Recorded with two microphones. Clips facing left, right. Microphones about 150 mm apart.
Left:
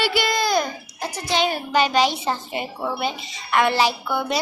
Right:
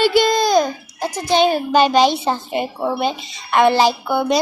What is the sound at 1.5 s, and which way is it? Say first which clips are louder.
A woman's voice: right 6 dB; 30° right (ahead or behind).